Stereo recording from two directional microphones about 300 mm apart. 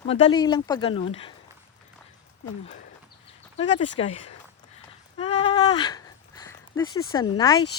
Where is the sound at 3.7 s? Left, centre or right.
Left.